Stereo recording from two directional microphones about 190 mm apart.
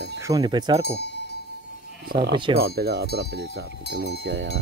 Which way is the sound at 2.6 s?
60° right (ahead or behind).